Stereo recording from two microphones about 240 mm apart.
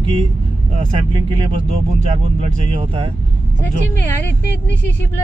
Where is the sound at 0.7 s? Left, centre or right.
Right.